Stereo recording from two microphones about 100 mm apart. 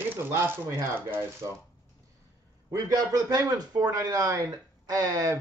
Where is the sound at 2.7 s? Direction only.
40° right (ahead or behind).